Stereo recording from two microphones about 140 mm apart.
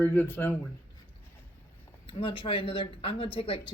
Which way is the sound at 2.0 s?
40° left (ahead or behind).